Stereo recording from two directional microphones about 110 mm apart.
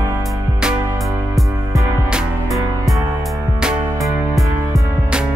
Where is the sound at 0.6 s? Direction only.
5° right (ahead or behind).